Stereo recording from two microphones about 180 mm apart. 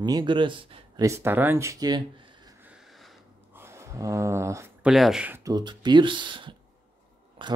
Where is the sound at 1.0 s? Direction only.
15° right (ahead or behind).